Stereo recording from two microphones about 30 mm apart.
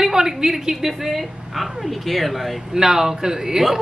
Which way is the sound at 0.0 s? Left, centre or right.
Centre.